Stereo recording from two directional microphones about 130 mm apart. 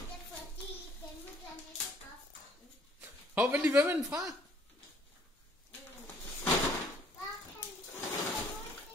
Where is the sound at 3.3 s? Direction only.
15° right (ahead or behind).